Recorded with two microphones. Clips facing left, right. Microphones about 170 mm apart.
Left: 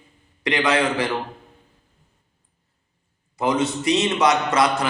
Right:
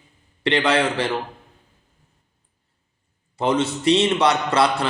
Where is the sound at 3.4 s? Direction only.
30° right (ahead or behind).